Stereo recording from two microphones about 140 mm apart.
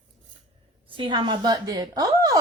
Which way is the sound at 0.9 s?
35° right (ahead or behind).